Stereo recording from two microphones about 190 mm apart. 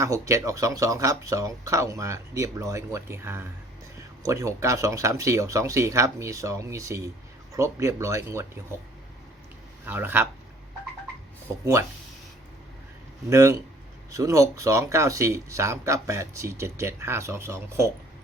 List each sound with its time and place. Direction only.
0.0 s speech: 15° right (ahead or behind)
9.8 s speech: 10° right (ahead or behind)
11.4 s speech: 15° right (ahead or behind)
13.3 s speech: 15° right (ahead or behind)